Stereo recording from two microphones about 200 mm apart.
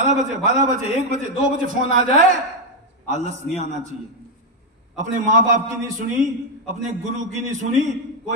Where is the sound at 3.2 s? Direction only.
35° right (ahead or behind).